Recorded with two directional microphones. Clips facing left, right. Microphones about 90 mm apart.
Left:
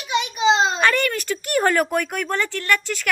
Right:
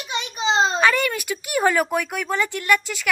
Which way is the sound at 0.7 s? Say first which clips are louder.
Even; 5° right (ahead or behind).